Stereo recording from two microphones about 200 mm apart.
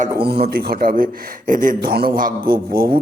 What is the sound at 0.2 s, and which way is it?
Speech, 25° right (ahead or behind).